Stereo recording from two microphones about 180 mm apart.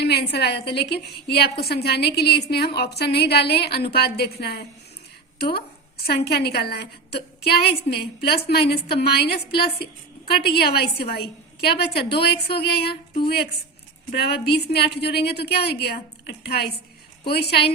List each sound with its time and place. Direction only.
0.0 s a woman's voice: 65° left (ahead or behind)